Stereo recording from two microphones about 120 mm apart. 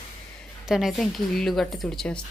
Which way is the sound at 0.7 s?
5° right (ahead or behind).